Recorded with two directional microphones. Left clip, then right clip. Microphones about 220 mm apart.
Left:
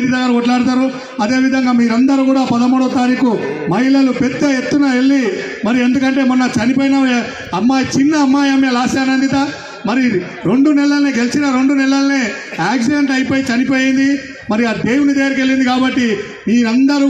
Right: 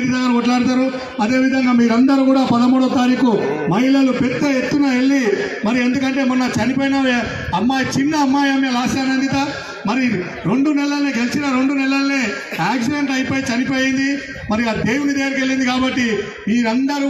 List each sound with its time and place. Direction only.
0.1 s a man's voice: 55° left (ahead or behind)
13.7 s a man's voice: 55° right (ahead or behind)
14.5 s a man's voice: 50° left (ahead or behind)